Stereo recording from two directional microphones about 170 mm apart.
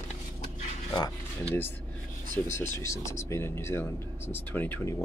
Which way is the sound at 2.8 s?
15° left (ahead or behind).